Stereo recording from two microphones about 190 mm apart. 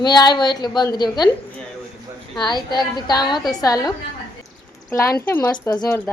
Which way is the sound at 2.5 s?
25° left (ahead or behind).